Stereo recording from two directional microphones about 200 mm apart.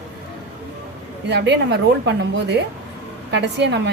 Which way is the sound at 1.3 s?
60° right (ahead or behind).